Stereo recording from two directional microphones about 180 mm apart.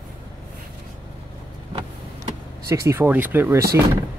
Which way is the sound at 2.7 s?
15° right (ahead or behind).